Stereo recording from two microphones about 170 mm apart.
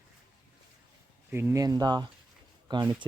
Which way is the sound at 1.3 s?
15° right (ahead or behind).